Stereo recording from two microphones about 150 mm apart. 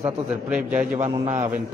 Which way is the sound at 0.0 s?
10° right (ahead or behind).